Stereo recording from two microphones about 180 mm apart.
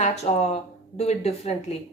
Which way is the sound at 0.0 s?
40° left (ahead or behind).